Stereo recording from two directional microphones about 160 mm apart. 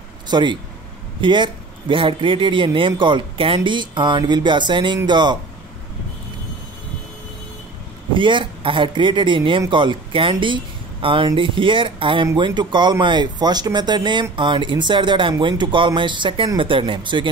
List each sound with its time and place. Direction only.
0.3 s speech: 30° right (ahead or behind)
8.1 s speech: 30° right (ahead or behind)